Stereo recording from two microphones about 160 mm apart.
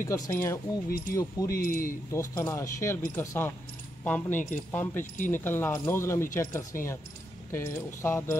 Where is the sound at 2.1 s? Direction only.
20° left (ahead or behind).